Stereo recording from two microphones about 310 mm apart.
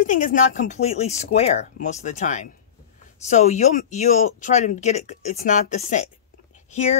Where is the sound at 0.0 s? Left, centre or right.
Left.